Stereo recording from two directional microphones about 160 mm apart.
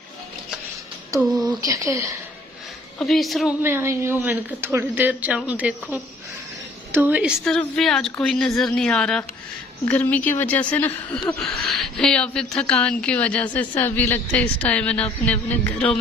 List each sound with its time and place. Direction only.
1.5 s speech: 20° right (ahead or behind)
3.0 s speech: centre (ahead or behind)
3.6 s speech: 15° right (ahead or behind)
7.4 s a woman's voice: 5° left (ahead or behind)